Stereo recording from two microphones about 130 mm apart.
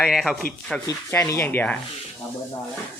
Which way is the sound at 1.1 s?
20° left (ahead or behind).